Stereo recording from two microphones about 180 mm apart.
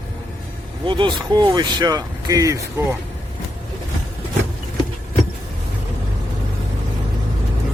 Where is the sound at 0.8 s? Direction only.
25° right (ahead or behind).